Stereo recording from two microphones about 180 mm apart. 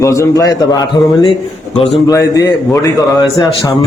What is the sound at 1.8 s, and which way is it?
A man's voice, 30° left (ahead or behind).